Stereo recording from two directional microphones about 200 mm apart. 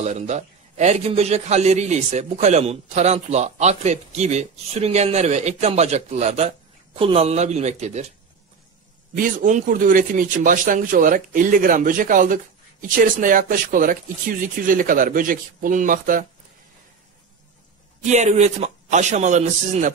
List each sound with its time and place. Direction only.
0.0 s a man's voice: 35° right (ahead or behind)
9.1 s a man's voice: 40° right (ahead or behind)
18.0 s a man's voice: 35° right (ahead or behind)